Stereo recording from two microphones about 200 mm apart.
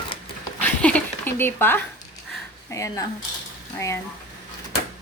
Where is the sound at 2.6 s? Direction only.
15° left (ahead or behind).